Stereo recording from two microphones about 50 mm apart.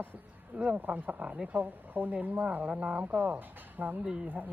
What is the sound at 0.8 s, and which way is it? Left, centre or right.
Speech, right.